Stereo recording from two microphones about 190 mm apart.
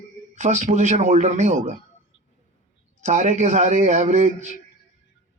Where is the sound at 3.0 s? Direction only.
40° right (ahead or behind).